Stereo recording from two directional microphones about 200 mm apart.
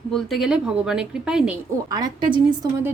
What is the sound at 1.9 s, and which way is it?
A woman's voice, 20° right (ahead or behind).